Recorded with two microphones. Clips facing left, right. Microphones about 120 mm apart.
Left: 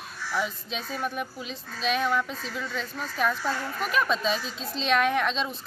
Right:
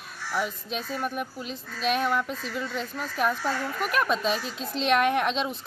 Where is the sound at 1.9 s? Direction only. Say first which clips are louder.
Left 1 dB; 5° right (ahead or behind).